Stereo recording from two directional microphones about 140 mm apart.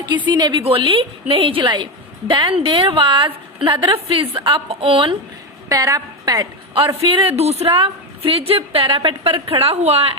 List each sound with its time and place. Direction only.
0.3 s a woman's voice: 30° right (ahead or behind)
5.6 s a woman's voice: 25° right (ahead or behind); by 10.2 s 45° right (ahead or behind)